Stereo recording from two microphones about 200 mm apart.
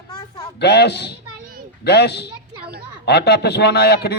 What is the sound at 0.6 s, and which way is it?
Speech, 55° left (ahead or behind).